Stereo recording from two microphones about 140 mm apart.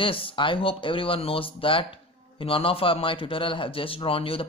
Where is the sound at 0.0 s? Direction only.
40° left (ahead or behind).